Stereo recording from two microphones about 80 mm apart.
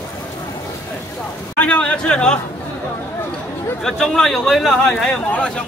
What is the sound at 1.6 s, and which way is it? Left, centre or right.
Speech, centre.